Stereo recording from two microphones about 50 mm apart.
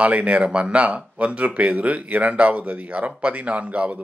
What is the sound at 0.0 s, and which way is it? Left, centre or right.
Speech, right.